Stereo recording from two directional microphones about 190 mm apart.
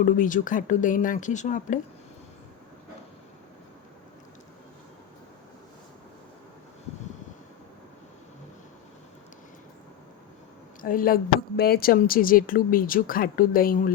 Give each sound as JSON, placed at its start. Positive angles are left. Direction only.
{"t": 0.0, "sound": "speech", "side_deg": 45}
{"t": 10.8, "sound": "speech", "side_deg": 45}